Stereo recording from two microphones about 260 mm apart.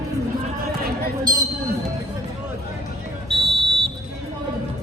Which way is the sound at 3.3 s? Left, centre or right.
Centre.